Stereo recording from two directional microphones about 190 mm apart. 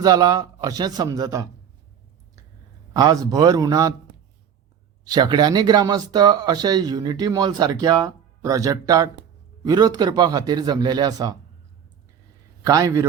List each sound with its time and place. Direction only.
0.0 s speech: 20° right (ahead or behind)
2.9 s speech: 20° right (ahead or behind)
5.0 s speech: 20° right (ahead or behind)
12.6 s a man's voice: 20° right (ahead or behind)